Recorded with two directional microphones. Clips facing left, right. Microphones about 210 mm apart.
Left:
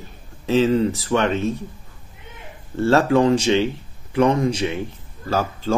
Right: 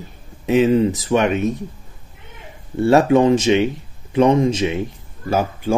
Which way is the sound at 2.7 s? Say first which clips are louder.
Right 3 dB; 15° right (ahead or behind).